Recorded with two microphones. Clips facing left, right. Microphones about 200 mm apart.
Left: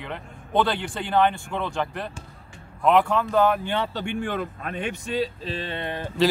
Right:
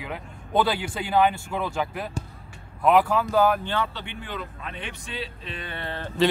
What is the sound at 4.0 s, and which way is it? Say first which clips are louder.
Speech: left 8 dB; 50° left (ahead or behind).